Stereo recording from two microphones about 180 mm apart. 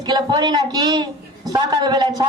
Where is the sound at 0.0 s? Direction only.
20° right (ahead or behind).